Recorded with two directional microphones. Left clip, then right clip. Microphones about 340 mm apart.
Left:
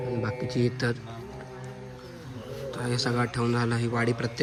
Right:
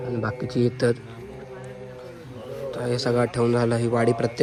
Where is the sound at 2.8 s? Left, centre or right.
Centre.